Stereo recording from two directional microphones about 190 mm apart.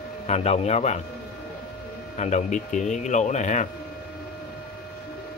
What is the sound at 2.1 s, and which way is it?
Speech, 40° left (ahead or behind).